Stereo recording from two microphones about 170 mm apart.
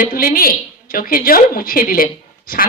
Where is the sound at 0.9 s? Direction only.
55° left (ahead or behind).